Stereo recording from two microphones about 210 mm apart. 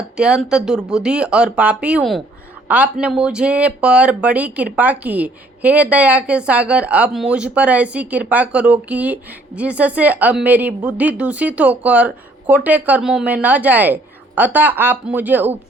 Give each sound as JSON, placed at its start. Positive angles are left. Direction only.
{"t": 0.2, "sound": "speech", "side_deg": -5}